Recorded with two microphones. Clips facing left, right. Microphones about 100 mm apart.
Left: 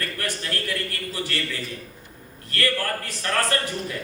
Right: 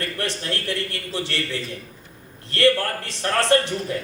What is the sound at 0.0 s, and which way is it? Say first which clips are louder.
A man's voice: right 2 dB; 25° right (ahead or behind).